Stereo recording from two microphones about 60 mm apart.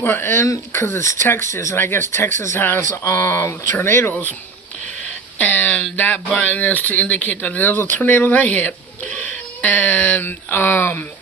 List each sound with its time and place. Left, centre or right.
0.0 s speech: left
3.0 s speech: left
3.8 s speech: left
4.1 s speech: left
5.4 s speech: left